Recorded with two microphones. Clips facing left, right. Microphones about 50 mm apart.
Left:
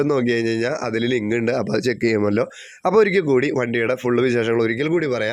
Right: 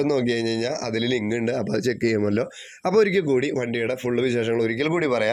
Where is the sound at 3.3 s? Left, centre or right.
Left.